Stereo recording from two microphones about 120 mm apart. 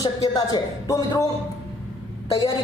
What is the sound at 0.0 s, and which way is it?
Speech, 35° left (ahead or behind).